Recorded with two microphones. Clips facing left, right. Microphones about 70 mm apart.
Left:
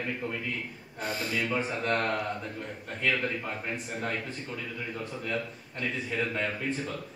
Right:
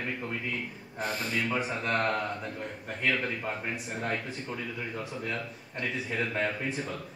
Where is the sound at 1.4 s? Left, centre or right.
Centre.